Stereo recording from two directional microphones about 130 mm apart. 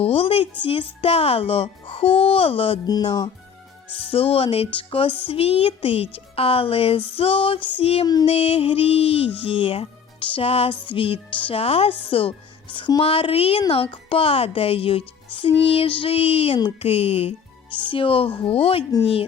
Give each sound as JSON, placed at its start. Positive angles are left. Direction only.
{"t": 0.0, "sound": "music", "side_deg": 45}
{"t": 0.6, "sound": "speech", "side_deg": 45}
{"t": 2.8, "sound": "speech", "side_deg": 30}
{"t": 3.9, "sound": "speech", "side_deg": 45}
{"t": 8.0, "sound": "speech", "side_deg": 30}
{"t": 8.3, "sound": "speech", "side_deg": 50}